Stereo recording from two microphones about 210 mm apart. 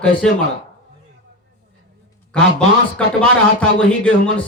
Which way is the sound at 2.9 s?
5° left (ahead or behind).